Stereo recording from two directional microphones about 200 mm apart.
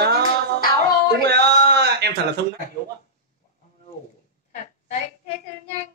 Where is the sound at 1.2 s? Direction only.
55° right (ahead or behind).